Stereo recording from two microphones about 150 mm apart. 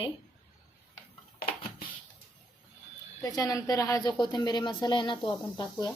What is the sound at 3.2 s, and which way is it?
A woman's voice, 25° left (ahead or behind).